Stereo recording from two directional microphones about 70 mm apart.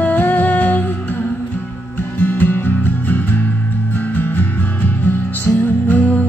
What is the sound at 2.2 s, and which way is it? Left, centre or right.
Music, left.